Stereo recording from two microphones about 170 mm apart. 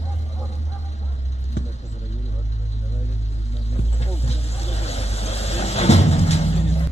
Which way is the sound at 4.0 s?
40° left (ahead or behind).